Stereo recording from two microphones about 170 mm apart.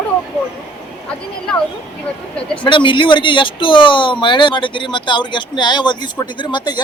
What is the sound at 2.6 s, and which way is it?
Speech, 30° left (ahead or behind).